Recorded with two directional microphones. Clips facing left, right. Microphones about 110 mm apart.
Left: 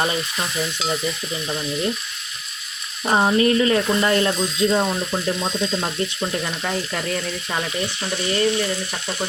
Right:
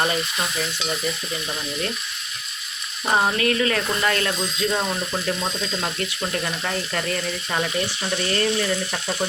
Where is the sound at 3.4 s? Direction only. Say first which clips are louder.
Left 5 dB; 25° left (ahead or behind).